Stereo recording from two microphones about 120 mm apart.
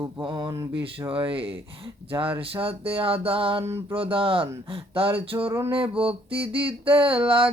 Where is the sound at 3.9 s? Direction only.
50° right (ahead or behind).